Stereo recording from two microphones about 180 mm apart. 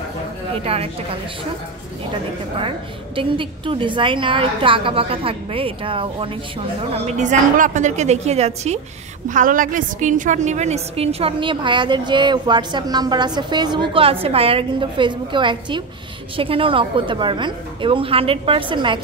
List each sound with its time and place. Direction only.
0.7 s a woman's voice: 30° right (ahead or behind)
3.2 s a woman's voice: 30° right (ahead or behind)
9.3 s a woman's voice: 50° right (ahead or behind); by 18.9 s 25° right (ahead or behind)